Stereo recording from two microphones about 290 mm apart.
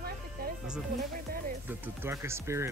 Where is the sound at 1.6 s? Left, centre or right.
Centre.